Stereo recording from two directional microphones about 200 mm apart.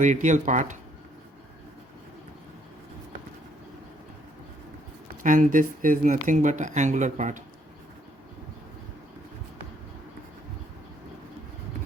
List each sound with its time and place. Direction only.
0.0 s speech: 40° right (ahead or behind)
5.2 s speech: 40° right (ahead or behind)